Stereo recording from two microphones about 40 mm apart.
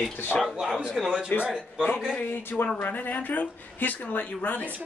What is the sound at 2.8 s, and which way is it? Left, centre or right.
Speech, left.